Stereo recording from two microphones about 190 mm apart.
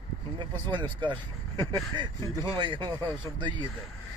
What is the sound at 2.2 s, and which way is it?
Speech, 15° left (ahead or behind).